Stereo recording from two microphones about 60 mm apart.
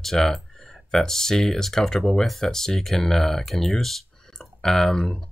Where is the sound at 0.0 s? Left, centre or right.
Centre.